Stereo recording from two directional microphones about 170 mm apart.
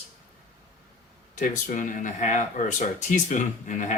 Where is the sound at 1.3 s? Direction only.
50° left (ahead or behind).